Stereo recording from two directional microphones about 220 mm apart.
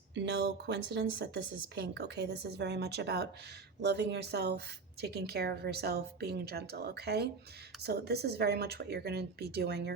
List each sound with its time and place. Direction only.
0.1 s a woman's voice: 50° right (ahead or behind)